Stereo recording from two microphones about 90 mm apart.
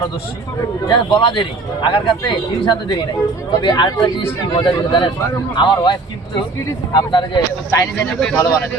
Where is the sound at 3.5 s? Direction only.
55° left (ahead or behind).